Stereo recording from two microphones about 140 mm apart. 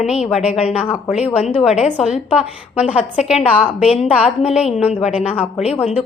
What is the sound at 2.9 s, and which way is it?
Speech, 55° left (ahead or behind).